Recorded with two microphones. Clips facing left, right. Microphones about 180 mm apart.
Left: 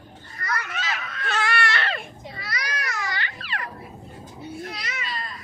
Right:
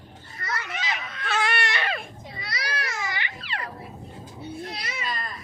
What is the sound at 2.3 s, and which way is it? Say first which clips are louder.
Children playing: even; 20° right (ahead or behind).